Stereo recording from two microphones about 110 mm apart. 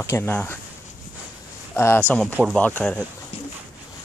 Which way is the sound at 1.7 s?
25° left (ahead or behind).